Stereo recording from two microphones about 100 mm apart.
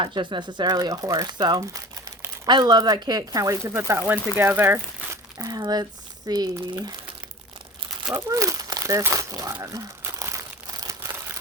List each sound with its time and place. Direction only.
0.0 s speech: 55° right (ahead or behind); by 4.8 s 25° right (ahead or behind)
5.4 s speech: 40° right (ahead or behind)
8.1 s speech: 30° right (ahead or behind)
9.6 s crumpling: 30° right (ahead or behind)